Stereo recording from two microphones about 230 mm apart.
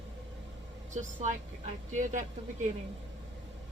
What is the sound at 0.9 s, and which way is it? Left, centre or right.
Speech, right.